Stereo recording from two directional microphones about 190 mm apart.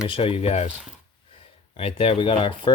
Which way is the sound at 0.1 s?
30° left (ahead or behind).